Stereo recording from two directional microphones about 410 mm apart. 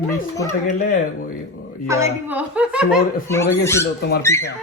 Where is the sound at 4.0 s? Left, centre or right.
Left.